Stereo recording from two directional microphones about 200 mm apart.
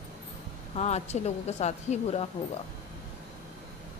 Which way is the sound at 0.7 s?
35° left (ahead or behind).